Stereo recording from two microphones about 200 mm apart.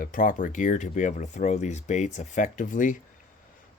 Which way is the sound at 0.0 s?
45° left (ahead or behind).